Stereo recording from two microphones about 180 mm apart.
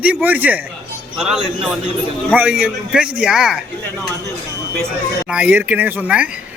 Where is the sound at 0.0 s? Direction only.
10° right (ahead or behind).